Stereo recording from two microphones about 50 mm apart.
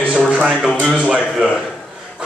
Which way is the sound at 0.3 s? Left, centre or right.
Centre.